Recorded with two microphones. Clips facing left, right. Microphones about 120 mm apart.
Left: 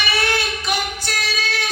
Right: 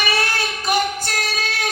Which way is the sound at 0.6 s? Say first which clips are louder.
Right 4 dB; 45° right (ahead or behind).